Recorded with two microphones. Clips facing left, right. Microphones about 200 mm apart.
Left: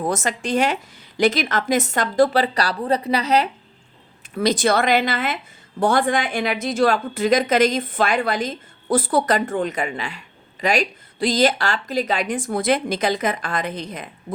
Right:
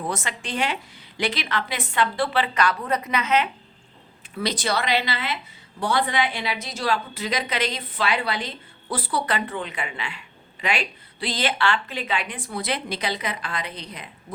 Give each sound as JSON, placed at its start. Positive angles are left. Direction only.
{"t": 0.0, "sound": "a woman's voice", "side_deg": 45}
{"t": 4.4, "sound": "a woman's voice", "side_deg": 45}